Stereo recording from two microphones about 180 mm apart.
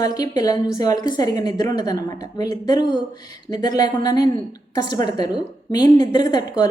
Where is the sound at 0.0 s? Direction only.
20° left (ahead or behind).